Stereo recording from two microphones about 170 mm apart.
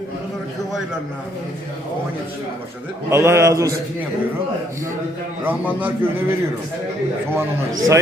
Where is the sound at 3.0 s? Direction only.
15° right (ahead or behind).